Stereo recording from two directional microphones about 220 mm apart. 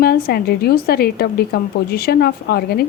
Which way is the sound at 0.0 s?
45° left (ahead or behind).